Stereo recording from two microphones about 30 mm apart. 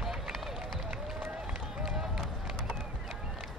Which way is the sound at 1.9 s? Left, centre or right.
Centre.